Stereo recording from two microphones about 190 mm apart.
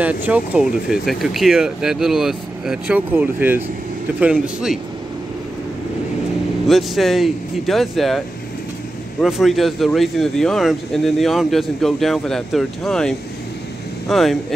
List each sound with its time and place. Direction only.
0.0 s speech: 10° right (ahead or behind)
6.7 s speech: centre (ahead or behind)
9.2 s speech: centre (ahead or behind)